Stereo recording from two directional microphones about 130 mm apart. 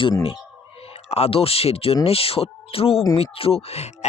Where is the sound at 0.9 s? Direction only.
55° left (ahead or behind).